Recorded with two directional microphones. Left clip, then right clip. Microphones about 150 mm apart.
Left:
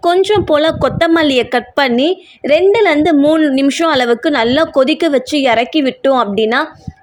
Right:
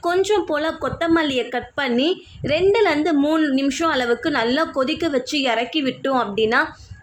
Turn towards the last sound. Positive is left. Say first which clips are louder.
# left 6 dB
turn(degrees=50)  # may be behind; listen again after turning